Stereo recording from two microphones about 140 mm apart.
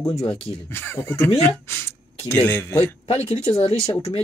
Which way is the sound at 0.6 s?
15° left (ahead or behind).